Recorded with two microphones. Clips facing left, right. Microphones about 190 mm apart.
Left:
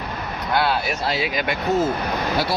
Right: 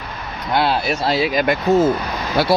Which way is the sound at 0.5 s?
25° right (ahead or behind).